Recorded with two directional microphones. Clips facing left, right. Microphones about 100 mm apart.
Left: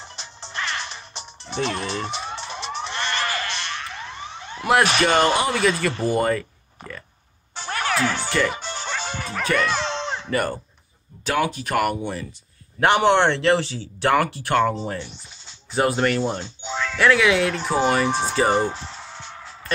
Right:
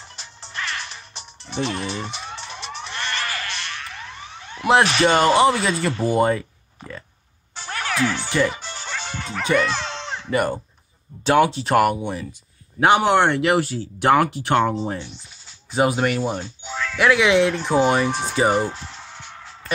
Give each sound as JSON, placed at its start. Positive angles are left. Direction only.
{"t": 0.0, "sound": "music", "side_deg": 25}
{"t": 5.0, "sound": "speech", "side_deg": -25}
{"t": 6.8, "sound": "burping", "side_deg": 55}
{"t": 7.5, "sound": "music", "side_deg": 50}
{"t": 9.5, "sound": "speech", "side_deg": -20}
{"t": 9.8, "sound": "a sound", "side_deg": 30}
{"t": 10.3, "sound": "speech", "side_deg": -15}
{"t": 16.4, "sound": "music", "side_deg": 25}
{"t": 16.9, "sound": "speech", "side_deg": -10}
{"t": 18.7, "sound": "music", "side_deg": 20}